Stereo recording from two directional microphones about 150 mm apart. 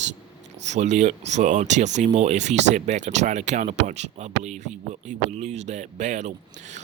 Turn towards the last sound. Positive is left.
turn(degrees=-50)  # may be behind; listen again after turning